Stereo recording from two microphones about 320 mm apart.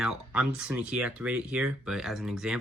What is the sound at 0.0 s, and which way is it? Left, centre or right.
Speech, centre.